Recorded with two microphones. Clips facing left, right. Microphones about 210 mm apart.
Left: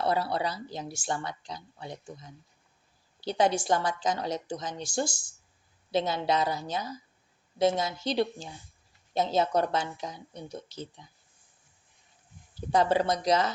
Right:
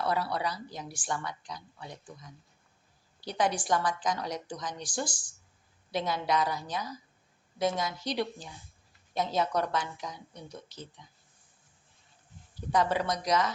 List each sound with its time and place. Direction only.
0.0 s speech: 25° left (ahead or behind)
12.7 s speech: 30° left (ahead or behind)